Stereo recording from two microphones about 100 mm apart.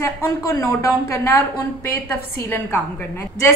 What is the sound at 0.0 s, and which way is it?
A woman's voice, 25° left (ahead or behind).